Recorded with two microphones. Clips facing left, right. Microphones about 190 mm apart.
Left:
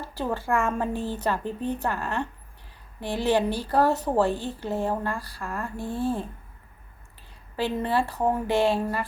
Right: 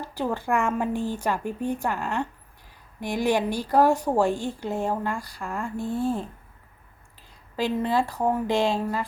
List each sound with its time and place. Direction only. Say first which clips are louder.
0.0 s a sound: right 2 dB; 15° right (ahead or behind)
0.3 s a woman's voice: even; 15° right (ahead or behind)
7.5 s a woman's voice: right 1 dB; 15° right (ahead or behind)